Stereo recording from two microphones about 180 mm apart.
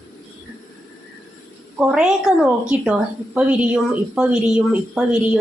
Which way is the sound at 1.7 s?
5° right (ahead or behind).